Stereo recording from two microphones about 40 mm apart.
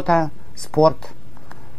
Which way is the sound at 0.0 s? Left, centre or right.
Centre.